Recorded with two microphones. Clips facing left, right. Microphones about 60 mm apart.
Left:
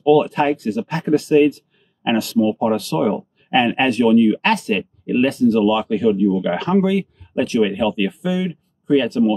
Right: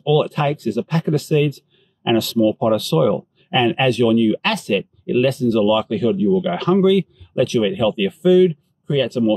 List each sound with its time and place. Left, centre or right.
0.0 s speech: left
8.8 s speech: left